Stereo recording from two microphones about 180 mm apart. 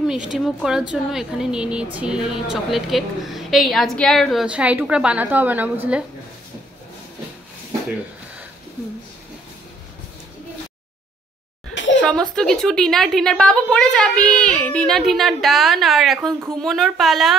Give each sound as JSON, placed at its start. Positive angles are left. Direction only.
{"t": 0.3, "sound": "speech", "side_deg": -5}
{"t": 11.7, "sound": "laughter", "side_deg": 90}
{"t": 12.0, "sound": "speech", "side_deg": 5}